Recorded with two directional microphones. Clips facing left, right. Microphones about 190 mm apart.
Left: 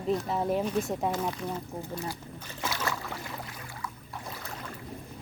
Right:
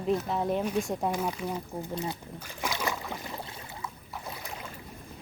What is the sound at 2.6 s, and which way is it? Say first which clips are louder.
Boat: right 1 dB; 15° right (ahead or behind).